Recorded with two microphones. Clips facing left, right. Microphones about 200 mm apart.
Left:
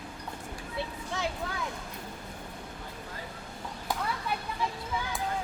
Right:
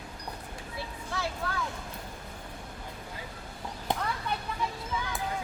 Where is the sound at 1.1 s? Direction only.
20° left (ahead or behind).